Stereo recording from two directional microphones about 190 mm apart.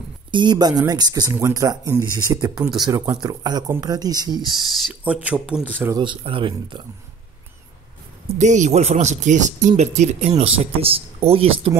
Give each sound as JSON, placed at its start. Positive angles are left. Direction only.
{"t": 0.3, "sound": "speech", "side_deg": -25}
{"t": 4.4, "sound": "speech", "side_deg": -5}
{"t": 5.9, "sound": "speech", "side_deg": -25}
{"t": 8.4, "sound": "speech", "side_deg": -40}